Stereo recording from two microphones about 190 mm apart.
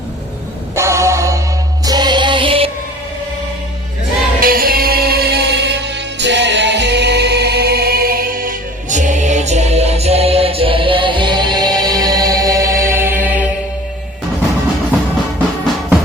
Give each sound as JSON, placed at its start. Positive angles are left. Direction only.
{"t": 0.8, "sound": "music", "side_deg": -15}
{"t": 4.4, "sound": "music", "side_deg": -50}